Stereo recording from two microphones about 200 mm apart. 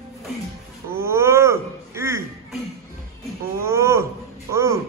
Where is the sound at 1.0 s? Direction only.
15° right (ahead or behind).